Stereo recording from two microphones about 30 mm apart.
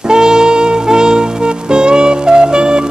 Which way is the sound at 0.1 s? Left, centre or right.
Right.